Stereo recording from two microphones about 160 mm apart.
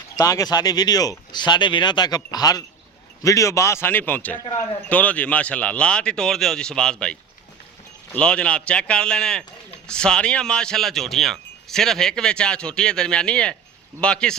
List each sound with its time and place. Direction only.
0.2 s a man's voice: 20° left (ahead or behind); by 14.3 s 5° left (ahead or behind)